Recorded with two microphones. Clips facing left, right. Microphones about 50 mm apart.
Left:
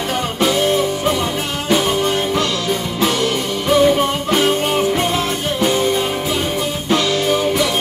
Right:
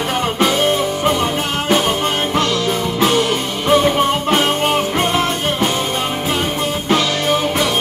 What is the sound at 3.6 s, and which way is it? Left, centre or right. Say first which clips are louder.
Music: even; right.